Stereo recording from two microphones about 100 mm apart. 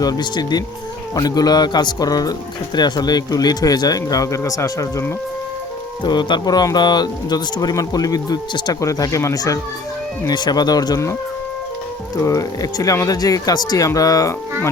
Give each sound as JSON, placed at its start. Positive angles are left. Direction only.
{"t": 0.0, "sound": "a man's voice", "side_deg": 45}
{"t": 6.0, "sound": "speech", "side_deg": 50}
{"t": 12.2, "sound": "speech", "side_deg": 35}